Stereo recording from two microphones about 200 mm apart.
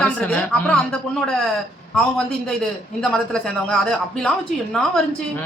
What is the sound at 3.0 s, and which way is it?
Speech, 5° left (ahead or behind).